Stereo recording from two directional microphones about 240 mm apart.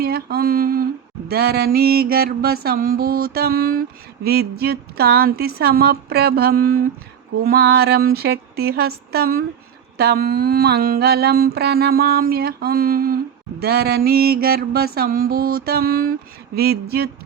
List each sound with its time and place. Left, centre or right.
0.0 s mantra: right